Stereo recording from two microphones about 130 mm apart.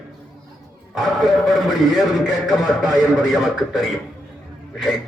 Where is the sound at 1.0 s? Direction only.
Centre (ahead or behind).